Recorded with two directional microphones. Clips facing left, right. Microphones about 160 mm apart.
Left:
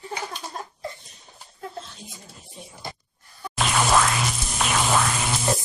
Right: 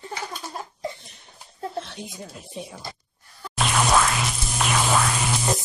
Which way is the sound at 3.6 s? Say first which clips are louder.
Even; centre (ahead or behind).